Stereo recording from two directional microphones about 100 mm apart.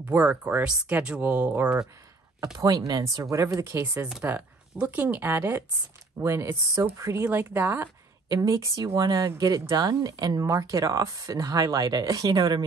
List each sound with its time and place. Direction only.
0.1 s speech: 15° right (ahead or behind)
2.5 s speech: 40° right (ahead or behind)
3.7 s speech: 20° right (ahead or behind)
8.3 s speech: 35° right (ahead or behind)